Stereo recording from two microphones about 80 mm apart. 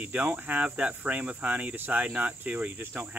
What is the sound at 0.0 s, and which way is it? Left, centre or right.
Speech, centre.